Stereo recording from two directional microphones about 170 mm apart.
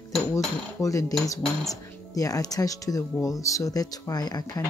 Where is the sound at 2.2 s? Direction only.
20° left (ahead or behind).